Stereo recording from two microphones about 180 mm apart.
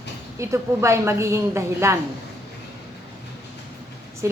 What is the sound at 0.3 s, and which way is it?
A woman's voice, 15° right (ahead or behind).